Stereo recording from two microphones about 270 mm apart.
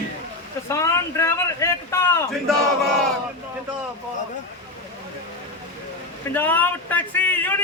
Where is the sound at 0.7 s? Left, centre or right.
Centre.